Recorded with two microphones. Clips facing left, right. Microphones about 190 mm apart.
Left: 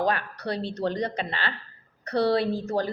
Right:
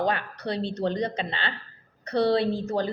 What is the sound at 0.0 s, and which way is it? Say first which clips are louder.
Speech: even; 25° right (ahead or behind).